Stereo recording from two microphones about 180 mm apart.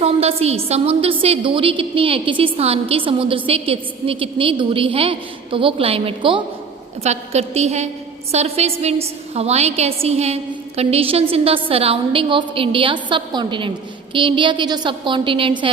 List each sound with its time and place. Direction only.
0.0 s a woman's voice: 35° right (ahead or behind)